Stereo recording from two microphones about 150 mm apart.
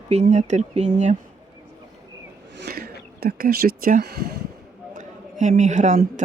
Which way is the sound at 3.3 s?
80° right.